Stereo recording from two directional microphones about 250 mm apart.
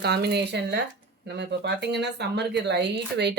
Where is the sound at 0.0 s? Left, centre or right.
Right.